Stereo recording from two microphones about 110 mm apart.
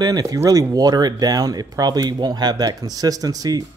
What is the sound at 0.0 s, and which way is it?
Speech, 35° right (ahead or behind).